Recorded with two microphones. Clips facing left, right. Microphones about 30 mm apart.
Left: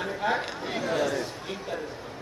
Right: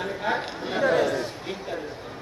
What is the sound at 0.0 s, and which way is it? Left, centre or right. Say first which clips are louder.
Chatter: right 1 dB; centre.